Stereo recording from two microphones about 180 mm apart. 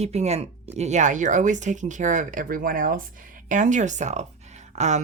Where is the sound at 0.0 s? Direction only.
35° right (ahead or behind).